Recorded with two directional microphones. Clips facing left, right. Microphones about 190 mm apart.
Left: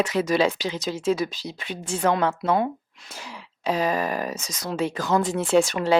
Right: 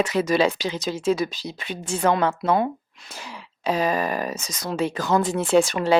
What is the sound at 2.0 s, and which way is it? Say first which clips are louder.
A woman's voice: right 1 dB; 20° right (ahead or behind).